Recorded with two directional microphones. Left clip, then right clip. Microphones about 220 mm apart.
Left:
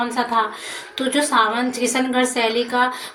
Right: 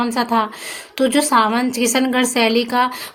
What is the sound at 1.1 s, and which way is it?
A woman's voice, 55° right (ahead or behind).